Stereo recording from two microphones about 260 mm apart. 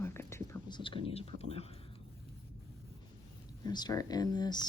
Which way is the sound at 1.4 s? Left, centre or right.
Left.